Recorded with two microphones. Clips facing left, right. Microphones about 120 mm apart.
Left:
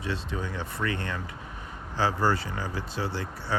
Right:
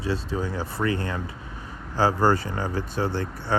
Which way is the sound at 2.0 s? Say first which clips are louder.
Right 5 dB; 45° right (ahead or behind).